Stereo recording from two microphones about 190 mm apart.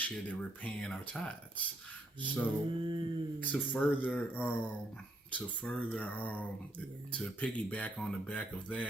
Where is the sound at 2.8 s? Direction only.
25° right (ahead or behind).